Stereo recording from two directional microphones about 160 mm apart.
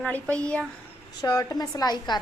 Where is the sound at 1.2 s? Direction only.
20° left (ahead or behind).